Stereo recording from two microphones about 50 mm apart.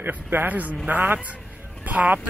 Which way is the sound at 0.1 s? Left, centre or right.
Right.